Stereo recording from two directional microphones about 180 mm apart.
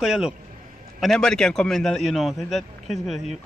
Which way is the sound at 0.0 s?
5° right (ahead or behind).